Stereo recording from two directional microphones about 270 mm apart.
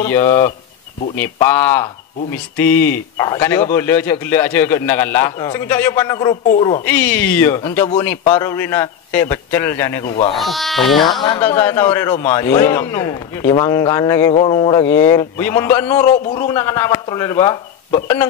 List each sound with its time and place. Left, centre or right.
0.0 s a man's voice: centre
6.9 s a man's voice: centre